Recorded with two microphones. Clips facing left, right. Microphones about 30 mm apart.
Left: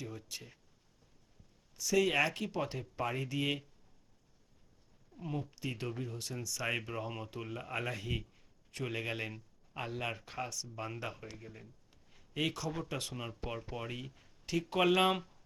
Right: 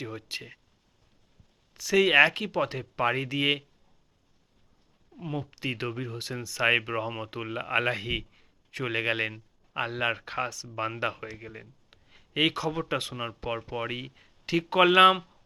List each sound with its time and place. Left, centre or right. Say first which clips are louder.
0.0 s speech: right 8 dB; right
1.7 s speech: right 9 dB; right
2.9 s speech: right 10 dB; right
5.1 s speech: right 6 dB; right
6.6 s speech: right 13 dB; right
8.2 s a man's voice: right 5 dB; right
15.1 s speech: right 6 dB; right